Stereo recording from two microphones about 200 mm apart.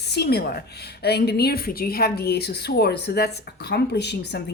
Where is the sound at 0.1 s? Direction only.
55° left (ahead or behind).